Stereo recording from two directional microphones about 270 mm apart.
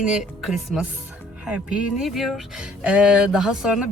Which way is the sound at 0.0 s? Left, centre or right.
Centre.